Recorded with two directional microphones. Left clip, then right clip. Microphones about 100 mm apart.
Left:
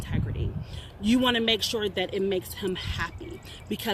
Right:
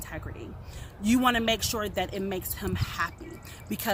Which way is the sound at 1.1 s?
50° right (ahead or behind).